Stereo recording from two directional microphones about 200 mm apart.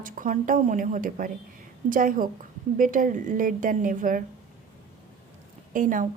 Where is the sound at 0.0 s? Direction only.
40° right (ahead or behind).